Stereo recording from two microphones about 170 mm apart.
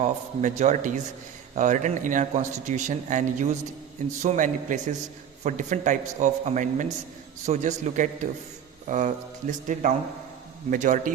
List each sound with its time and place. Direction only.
0.0 s a man's voice: 45° right (ahead or behind)